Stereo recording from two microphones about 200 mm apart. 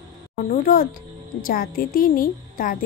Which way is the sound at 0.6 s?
45° left (ahead or behind).